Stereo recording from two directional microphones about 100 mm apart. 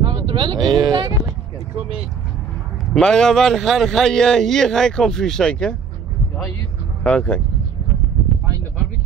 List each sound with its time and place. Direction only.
0.0 s a sound: 60° right (ahead or behind)
2.9 s a man's voice: 5° left (ahead or behind)
7.0 s speech: 10° left (ahead or behind)